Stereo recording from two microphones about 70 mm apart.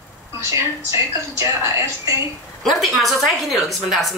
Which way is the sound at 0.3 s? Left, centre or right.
Right.